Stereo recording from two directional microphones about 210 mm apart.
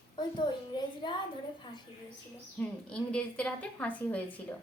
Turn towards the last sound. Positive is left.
turn(degrees=5)  # may be behind; listen again after turning